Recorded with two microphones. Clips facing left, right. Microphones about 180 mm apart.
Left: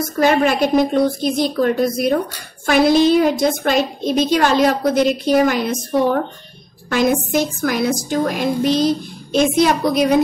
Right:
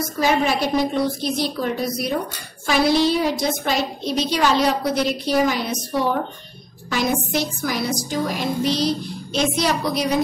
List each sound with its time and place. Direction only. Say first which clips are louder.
0.2 s a woman's voice: left 5 dB; 55° left (ahead or behind)
7.3 s a woman's voice: left 5 dB; 50° left (ahead or behind)